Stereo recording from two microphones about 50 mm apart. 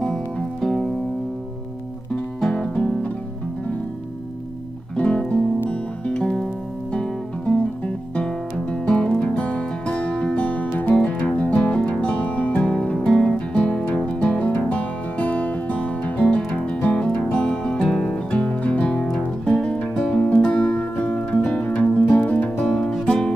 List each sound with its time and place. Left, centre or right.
0.0 s music: centre
2.5 s music: left
4.9 s music: left
6.2 s music: centre
6.9 s music: left
13.2 s guitar: left
14.0 s music: left
18.1 s music: left
19.0 s music: centre
22.7 s music: centre